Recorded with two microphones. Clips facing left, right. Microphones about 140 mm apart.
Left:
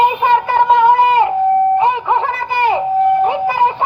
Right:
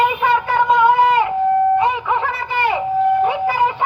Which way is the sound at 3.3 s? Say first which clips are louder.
Left 3 dB; 25° left (ahead or behind).